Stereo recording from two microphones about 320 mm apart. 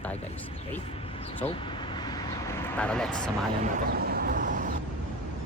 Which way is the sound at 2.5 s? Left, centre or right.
Centre.